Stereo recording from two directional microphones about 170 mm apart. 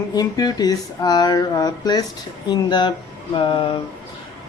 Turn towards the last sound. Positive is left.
turn(degrees=30)  # may be behind; listen again after turning